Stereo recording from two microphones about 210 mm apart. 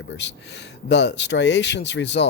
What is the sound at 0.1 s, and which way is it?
Speech, 60° left (ahead or behind).